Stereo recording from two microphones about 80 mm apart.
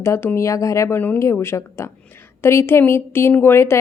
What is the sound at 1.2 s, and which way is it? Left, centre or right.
A woman's voice, left.